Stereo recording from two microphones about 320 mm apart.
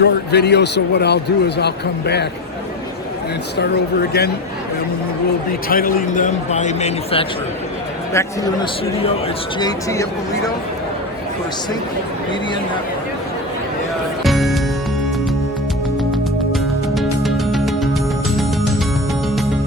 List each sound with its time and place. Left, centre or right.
0.0 s a man's voice: left
5.6 s a man's voice: left
8.1 s speech: centre
9.6 s speech: centre
14.3 s music: centre
16.1 s music: centre